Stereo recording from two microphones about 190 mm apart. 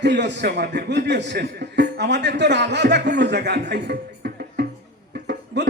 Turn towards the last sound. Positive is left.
turn(degrees=-60)  # may be behind; listen again after turning